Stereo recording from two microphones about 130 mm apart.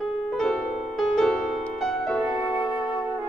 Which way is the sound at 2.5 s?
35° left (ahead or behind).